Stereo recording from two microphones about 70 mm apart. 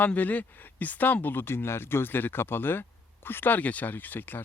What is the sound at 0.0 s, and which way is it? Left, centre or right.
Speech, left.